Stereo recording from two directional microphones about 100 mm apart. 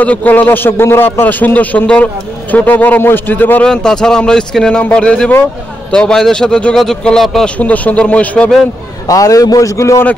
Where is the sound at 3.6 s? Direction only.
5° left (ahead or behind).